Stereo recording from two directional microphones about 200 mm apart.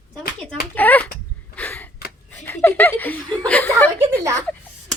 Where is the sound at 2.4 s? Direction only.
10° left (ahead or behind).